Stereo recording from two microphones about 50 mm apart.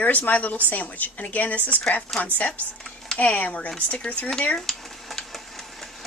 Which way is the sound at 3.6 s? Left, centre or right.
Left.